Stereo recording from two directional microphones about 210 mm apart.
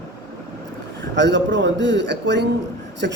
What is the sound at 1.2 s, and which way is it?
Speech, 55° right (ahead or behind).